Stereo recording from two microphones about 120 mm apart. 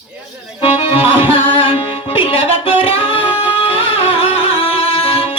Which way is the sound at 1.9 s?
50° left (ahead or behind).